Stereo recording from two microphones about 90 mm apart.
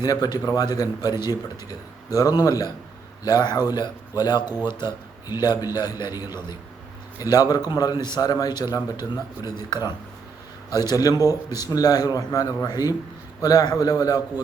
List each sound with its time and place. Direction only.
0.0 s a man's voice: 45° left (ahead or behind)